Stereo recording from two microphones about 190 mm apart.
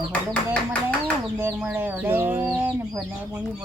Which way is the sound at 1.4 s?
10° right (ahead or behind).